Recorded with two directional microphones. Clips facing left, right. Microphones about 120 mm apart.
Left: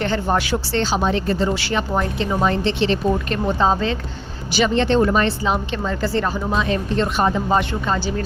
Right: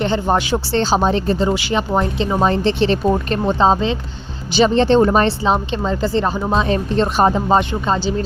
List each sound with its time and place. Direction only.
0.0 s a woman's voice: 20° right (ahead or behind)
1.4 s a woman's voice: 20° right (ahead or behind); by 3.4 s 35° right (ahead or behind)
3.4 s a woman's voice: 25° right (ahead or behind)
4.5 s a woman's voice: 35° right (ahead or behind)